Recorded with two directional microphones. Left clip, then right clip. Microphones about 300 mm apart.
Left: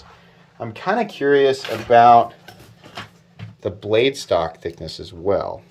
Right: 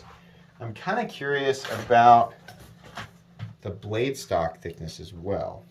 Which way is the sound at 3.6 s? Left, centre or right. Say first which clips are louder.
Left 11 dB; centre.